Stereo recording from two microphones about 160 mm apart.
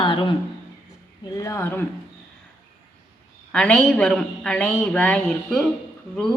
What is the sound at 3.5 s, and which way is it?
A woman's voice, 5° left (ahead or behind).